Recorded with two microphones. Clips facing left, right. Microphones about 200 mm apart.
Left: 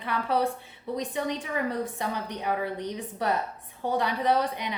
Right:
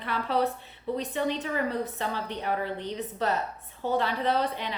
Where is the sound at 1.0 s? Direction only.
15° left (ahead or behind).